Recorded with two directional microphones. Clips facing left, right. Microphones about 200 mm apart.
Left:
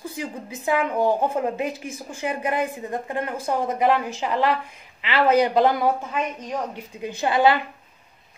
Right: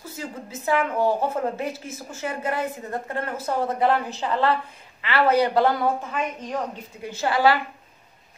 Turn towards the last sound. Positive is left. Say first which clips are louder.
# left 1 dB
turn(degrees=20)  # may be behind; listen again after turning